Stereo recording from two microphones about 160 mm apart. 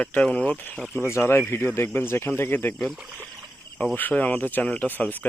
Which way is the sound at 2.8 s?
Centre (ahead or behind).